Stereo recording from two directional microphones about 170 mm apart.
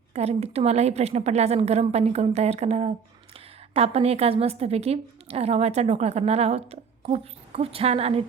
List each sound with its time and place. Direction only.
0.1 s a woman's voice: 40° right (ahead or behind)